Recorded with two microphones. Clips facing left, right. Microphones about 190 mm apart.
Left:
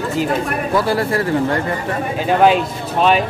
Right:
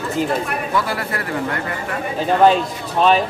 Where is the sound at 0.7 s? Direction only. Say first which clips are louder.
Left 7 dB; 30° left (ahead or behind).